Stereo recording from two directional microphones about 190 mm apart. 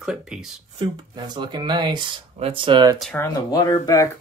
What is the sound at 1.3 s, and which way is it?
Speech, 25° right (ahead or behind).